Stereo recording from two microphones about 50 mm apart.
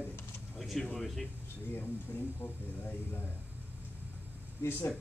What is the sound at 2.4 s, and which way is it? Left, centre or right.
Speech, left.